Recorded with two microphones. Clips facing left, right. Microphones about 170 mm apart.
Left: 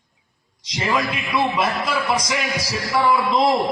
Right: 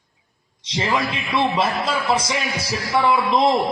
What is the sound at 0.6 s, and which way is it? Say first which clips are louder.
A man's voice: even; 30° right (ahead or behind).